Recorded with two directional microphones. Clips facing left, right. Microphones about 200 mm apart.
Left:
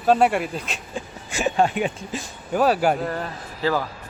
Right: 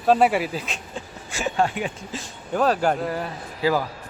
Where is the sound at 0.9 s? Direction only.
20° left (ahead or behind).